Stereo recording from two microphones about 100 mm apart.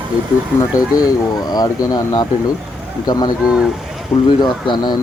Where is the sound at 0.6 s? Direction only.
35° left (ahead or behind).